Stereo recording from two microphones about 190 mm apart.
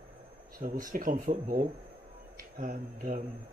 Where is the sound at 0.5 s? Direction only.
50° right (ahead or behind).